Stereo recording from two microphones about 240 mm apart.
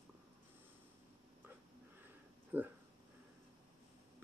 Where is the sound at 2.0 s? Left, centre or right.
Centre.